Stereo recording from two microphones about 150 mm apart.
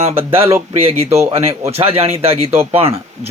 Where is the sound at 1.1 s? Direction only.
15° right (ahead or behind).